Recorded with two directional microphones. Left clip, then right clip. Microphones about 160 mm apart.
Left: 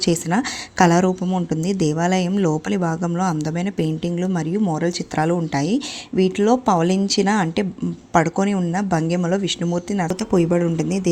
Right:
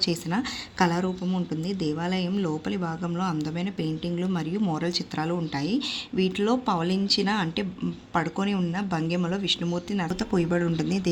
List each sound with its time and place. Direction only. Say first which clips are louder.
0.0 s speech: left 7 dB; 45° left (ahead or behind)
10.2 s speech: left 7 dB; 30° left (ahead or behind)